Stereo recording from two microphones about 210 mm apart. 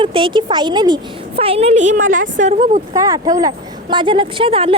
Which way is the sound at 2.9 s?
20° right (ahead or behind).